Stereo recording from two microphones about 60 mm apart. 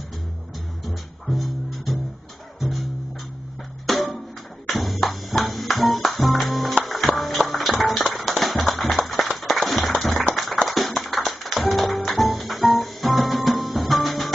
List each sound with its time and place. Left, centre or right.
0.8 s music: centre
3.8 s music: centre
9.2 s a sound: centre
10.3 s music: centre